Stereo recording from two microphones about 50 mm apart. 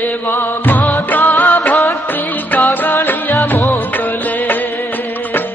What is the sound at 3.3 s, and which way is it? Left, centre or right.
Music, left.